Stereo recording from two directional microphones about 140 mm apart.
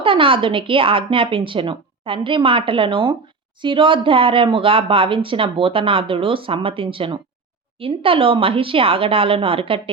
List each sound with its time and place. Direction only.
0.0 s speech: 40° right (ahead or behind)